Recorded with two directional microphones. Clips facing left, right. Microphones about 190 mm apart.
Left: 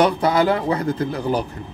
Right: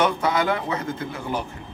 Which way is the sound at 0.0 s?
35° left (ahead or behind).